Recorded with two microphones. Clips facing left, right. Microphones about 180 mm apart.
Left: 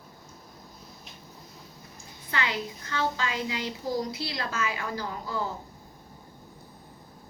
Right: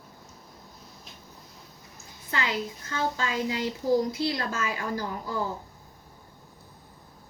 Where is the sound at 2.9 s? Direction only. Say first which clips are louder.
Even; 40° right (ahead or behind).